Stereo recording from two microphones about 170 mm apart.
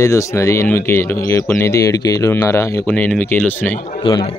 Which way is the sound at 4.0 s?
30° left (ahead or behind).